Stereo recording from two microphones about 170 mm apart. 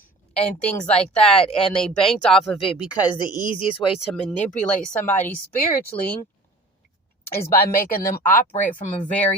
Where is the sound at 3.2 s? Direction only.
25° left (ahead or behind).